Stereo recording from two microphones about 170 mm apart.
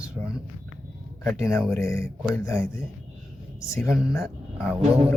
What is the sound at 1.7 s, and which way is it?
Speech, 15° left (ahead or behind).